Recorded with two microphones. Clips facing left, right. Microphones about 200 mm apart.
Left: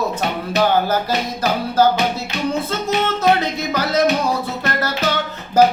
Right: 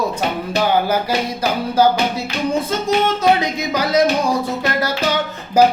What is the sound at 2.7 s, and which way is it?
Speech, 15° right (ahead or behind).